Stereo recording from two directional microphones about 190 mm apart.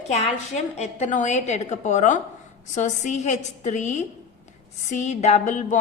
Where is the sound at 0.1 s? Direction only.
35° left (ahead or behind).